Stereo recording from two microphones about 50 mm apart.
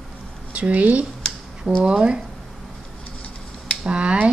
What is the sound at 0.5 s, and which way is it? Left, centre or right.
Speech, right.